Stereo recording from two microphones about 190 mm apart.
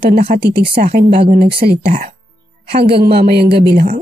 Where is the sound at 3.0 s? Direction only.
55° right (ahead or behind).